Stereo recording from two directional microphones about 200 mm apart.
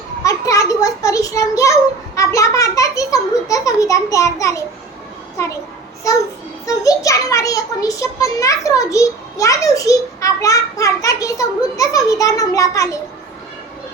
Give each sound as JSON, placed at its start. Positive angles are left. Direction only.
{"t": 0.2, "sound": "a sound", "side_deg": 15}
{"t": 2.1, "sound": "a child's voice", "side_deg": 15}
{"t": 6.7, "sound": "a child's voice", "side_deg": 15}